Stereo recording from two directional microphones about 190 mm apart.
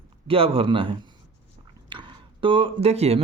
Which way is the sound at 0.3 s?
30° right (ahead or behind).